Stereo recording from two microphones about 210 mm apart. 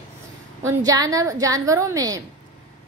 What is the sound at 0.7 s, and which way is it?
A woman's voice, 15° right (ahead or behind).